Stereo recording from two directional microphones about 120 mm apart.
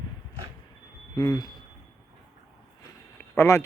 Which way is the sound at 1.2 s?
35° left (ahead or behind).